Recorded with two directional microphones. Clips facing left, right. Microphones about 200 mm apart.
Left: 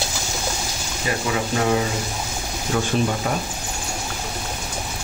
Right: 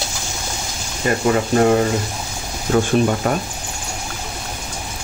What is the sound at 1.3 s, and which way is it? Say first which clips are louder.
Speech: right 6 dB; 50° right (ahead or behind).